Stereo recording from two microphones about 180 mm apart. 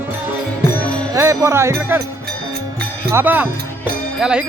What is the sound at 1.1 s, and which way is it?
Music, 15° right (ahead or behind).